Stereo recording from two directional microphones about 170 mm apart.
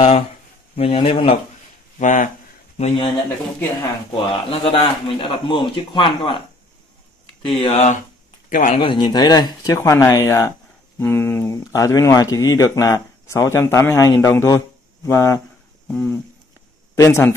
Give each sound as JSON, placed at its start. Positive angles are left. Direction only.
{"t": 0.7, "sound": "speech", "side_deg": 35}
{"t": 2.0, "sound": "speech", "side_deg": 45}
{"t": 2.8, "sound": "a man's voice", "side_deg": 30}
{"t": 7.5, "sound": "speech", "side_deg": 35}
{"t": 8.7, "sound": "a man's voice", "side_deg": 30}
{"t": 15.9, "sound": "a sound", "side_deg": 5}
{"t": 16.9, "sound": "a man's voice", "side_deg": 15}